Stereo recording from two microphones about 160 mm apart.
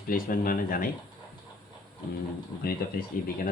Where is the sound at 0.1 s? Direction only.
60° left (ahead or behind).